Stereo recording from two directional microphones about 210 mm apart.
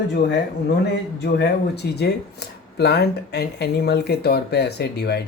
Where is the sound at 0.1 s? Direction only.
50° left (ahead or behind).